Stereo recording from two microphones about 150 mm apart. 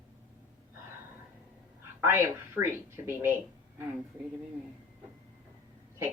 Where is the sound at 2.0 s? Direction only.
15° right (ahead or behind).